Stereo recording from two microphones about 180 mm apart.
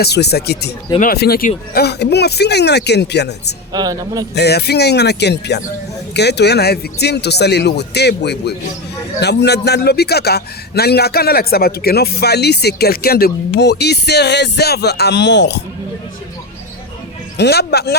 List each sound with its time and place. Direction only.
0.0 s a man's voice: 65° left (ahead or behind)
3.7 s speech: 20° right (ahead or behind)
4.4 s a man's voice: 65° left (ahead or behind)
17.3 s a man's voice: 65° left (ahead or behind)